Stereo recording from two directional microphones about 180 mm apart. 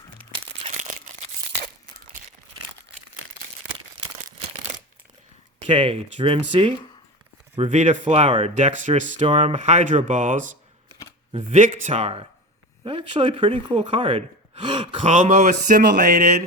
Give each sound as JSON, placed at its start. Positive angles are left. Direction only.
{"t": 0.6, "sound": "a sound", "side_deg": -40}
{"t": 5.6, "sound": "speech", "side_deg": -25}
{"t": 8.1, "sound": "speech", "side_deg": -30}
{"t": 9.2, "sound": "speech", "side_deg": -30}
{"t": 15.0, "sound": "speech", "side_deg": -45}